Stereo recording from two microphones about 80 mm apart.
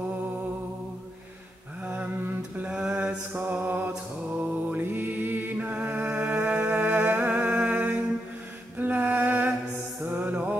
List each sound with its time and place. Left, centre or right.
2.6 s mantra: centre
4.6 s music: right
8.7 s a sound: right
10.0 s music: right